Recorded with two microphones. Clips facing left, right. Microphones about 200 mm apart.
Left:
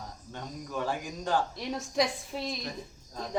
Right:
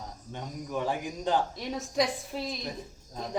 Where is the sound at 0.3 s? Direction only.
15° right (ahead or behind).